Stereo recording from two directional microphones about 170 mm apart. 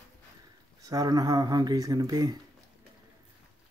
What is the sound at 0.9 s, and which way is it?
Speech, 20° right (ahead or behind).